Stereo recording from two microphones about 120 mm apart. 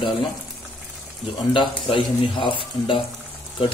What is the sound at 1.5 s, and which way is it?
Speech, 45° left (ahead or behind).